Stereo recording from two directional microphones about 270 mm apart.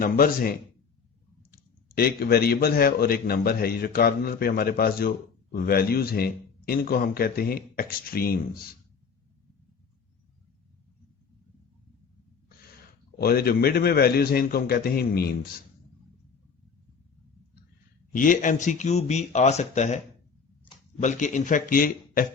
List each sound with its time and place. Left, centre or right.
0.0 s a man's voice: left
2.0 s a man's voice: left
13.1 s a man's voice: left
18.1 s speech: left